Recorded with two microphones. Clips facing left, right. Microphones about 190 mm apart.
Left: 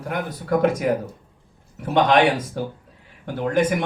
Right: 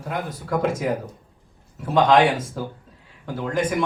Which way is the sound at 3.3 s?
65° left (ahead or behind).